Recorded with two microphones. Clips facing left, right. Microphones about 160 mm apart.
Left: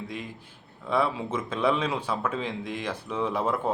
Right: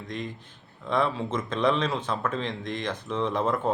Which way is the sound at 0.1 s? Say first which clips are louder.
Right 2 dB; 5° left (ahead or behind).